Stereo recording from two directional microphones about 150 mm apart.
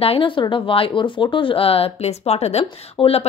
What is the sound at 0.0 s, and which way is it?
Speech, 35° left (ahead or behind).